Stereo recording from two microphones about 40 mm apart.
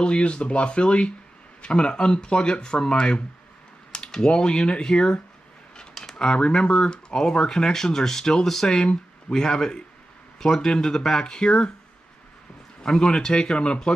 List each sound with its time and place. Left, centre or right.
0.0 s speech: left
12.8 s speech: centre